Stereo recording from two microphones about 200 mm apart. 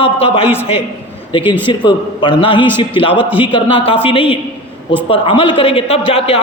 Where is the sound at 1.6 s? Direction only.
25° left (ahead or behind).